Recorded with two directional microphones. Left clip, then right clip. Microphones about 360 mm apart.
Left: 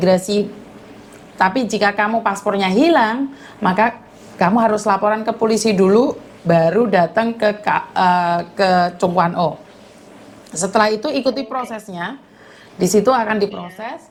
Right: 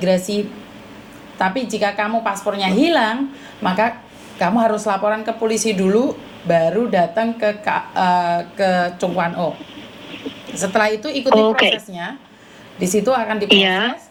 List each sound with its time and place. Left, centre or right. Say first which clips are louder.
0.0 s a woman's voice: left 3 dB; left
1.4 s a woman's voice: left 3 dB; left
10.5 s a woman's voice: left 2 dB; left
12.8 s a woman's voice: left 3 dB; left
13.5 s a woman's voice: right 18 dB; right